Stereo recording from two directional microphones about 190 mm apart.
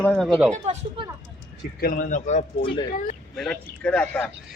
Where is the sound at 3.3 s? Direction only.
5° left (ahead or behind).